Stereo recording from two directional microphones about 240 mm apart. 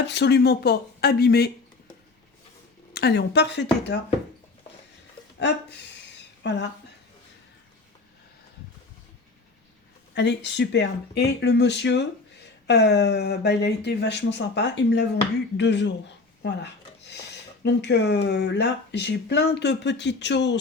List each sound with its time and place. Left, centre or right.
0.0 s speech: left
2.9 s speech: left
6.4 s speech: left
10.2 s speech: left